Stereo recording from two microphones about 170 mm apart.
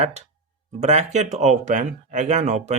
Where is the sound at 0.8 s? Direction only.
40° right (ahead or behind).